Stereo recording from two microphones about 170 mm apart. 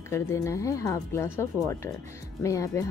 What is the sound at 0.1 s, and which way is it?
A woman's voice, 15° left (ahead or behind).